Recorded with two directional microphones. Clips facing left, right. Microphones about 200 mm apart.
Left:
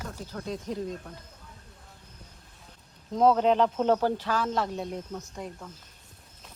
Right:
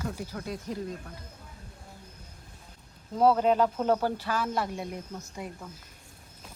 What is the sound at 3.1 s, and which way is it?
Speech, 5° right (ahead or behind).